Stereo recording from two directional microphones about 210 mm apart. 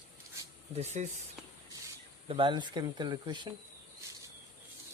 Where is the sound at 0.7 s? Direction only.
30° right (ahead or behind).